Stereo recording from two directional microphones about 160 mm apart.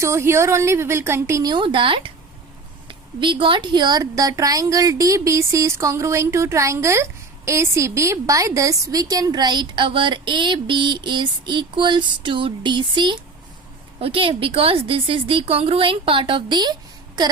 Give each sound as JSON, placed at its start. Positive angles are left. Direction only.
{"t": 0.0, "sound": "a woman's voice", "side_deg": -15}